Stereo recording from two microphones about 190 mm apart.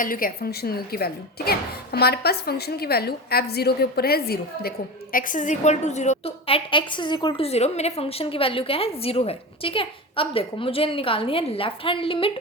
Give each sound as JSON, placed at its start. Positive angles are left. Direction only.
{"t": 0.0, "sound": "speech", "side_deg": 50}
{"t": 5.1, "sound": "a woman's voice", "side_deg": 45}